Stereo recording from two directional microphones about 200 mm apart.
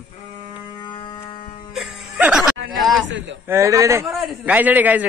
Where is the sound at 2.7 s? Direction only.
Centre (ahead or behind).